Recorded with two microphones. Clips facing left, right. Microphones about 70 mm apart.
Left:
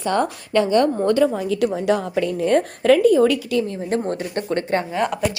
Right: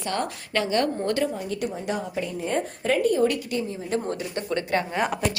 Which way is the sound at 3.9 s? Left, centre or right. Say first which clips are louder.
Left 5 dB; left.